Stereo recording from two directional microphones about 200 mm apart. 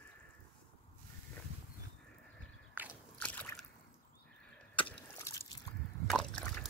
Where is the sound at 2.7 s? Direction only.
10° right (ahead or behind).